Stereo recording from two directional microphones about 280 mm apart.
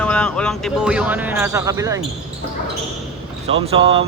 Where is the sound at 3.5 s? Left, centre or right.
Centre.